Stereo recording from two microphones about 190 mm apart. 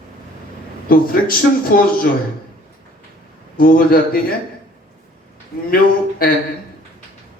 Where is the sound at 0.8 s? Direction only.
50° left (ahead or behind).